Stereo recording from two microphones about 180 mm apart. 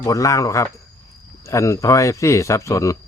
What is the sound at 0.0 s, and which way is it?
Speech, 20° left (ahead or behind).